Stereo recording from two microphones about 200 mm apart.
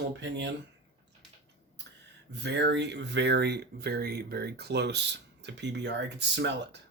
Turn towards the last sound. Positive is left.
turn(degrees=-60)  # may be behind; listen again after turning